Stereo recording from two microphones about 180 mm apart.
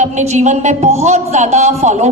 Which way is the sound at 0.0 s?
40° right (ahead or behind).